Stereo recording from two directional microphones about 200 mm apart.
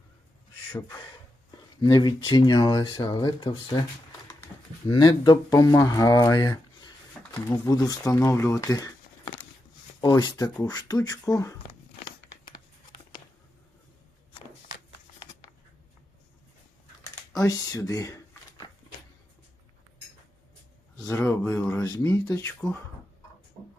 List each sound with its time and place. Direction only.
0.7 s speech: 15° left (ahead or behind)
4.9 s speech: 20° left (ahead or behind)
17.3 s speech: 15° left (ahead or behind)
21.1 s speech: 10° left (ahead or behind)